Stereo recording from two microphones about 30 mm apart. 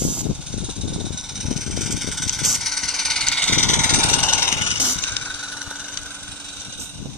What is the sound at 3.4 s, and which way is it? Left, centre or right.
Vehicle, left.